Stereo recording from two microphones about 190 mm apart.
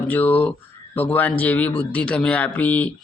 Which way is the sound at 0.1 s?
10° left (ahead or behind).